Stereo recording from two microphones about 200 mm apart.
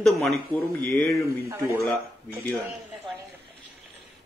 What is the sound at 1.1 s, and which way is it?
Speech, 15° left (ahead or behind).